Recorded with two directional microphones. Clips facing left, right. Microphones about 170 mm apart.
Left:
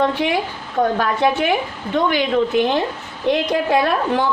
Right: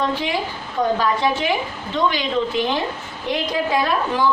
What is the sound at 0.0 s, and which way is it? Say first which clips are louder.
A woman's voice: left 4 dB; 60° left (ahead or behind).